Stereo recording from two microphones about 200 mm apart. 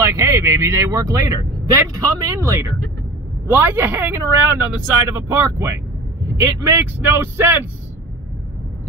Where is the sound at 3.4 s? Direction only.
10° right (ahead or behind).